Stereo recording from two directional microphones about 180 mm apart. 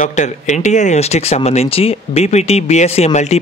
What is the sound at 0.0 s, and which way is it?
Speech, 40° left (ahead or behind).